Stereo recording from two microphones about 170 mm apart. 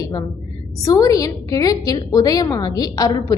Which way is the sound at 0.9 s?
20° left (ahead or behind).